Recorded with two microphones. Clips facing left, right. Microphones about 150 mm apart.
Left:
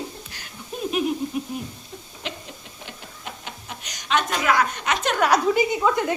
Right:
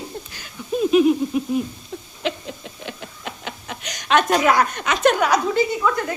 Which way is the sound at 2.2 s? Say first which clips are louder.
Right 10 dB; 90° right.